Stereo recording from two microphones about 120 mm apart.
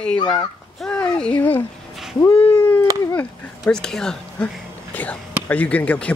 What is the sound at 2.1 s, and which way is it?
Cat, 20° left (ahead or behind).